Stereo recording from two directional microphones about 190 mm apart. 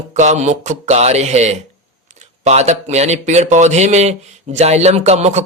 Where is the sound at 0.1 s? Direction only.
40° right (ahead or behind).